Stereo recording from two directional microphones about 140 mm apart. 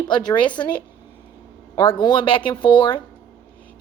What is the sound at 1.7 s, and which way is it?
A woman's voice, 35° left (ahead or behind).